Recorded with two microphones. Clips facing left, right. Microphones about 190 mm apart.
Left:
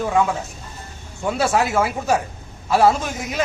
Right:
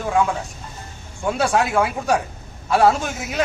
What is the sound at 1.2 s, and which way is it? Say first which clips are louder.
A man's voice: even; centre (ahead or behind).